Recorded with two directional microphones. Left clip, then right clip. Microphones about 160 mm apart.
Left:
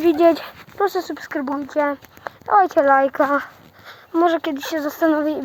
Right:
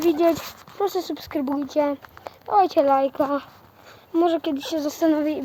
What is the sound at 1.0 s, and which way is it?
Speech, 15° left (ahead or behind).